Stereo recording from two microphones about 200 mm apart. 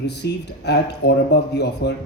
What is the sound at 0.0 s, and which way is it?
Speech, 55° left (ahead or behind).